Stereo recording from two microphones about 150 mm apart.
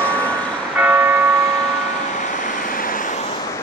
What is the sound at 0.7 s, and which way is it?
Church bell, 15° right (ahead or behind).